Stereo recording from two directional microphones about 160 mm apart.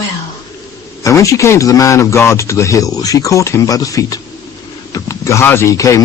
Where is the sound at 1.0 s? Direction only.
20° left (ahead or behind).